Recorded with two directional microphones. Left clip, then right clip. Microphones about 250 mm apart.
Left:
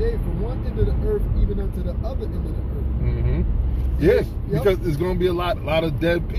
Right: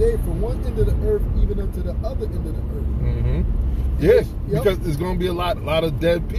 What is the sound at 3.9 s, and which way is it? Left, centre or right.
Speech, centre.